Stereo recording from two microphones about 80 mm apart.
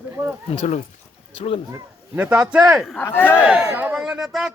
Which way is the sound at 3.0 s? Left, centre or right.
Left.